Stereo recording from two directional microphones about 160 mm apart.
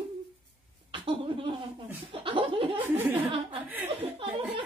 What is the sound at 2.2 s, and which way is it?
Chuckle, 35° right (ahead or behind).